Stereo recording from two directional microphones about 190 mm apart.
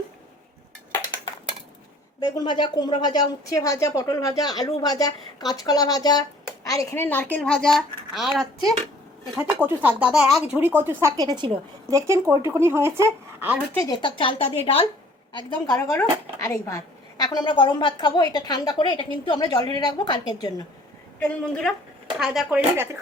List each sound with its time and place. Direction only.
2.2 s a woman's voice: 20° left (ahead or behind); by 11.9 s 25° right (ahead or behind)
11.9 s speech: 15° right (ahead or behind)
13.7 s speech: 20° left (ahead or behind)
21.2 s a woman's voice: 5° left (ahead or behind)